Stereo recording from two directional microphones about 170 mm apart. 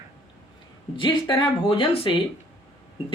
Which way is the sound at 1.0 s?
30° left (ahead or behind).